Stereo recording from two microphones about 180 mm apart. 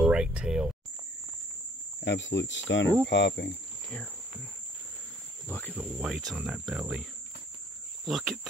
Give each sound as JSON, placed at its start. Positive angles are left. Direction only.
{"t": 0.0, "sound": "a sound", "side_deg": -5}
{"t": 2.0, "sound": "cricket", "side_deg": 85}
{"t": 3.1, "sound": "cricket", "side_deg": 70}
{"t": 5.8, "sound": "cricket", "side_deg": -5}